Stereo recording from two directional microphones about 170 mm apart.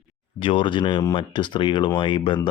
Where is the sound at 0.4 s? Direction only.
30° left (ahead or behind).